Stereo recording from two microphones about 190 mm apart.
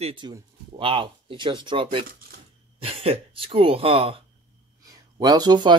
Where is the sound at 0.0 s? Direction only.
25° right (ahead or behind).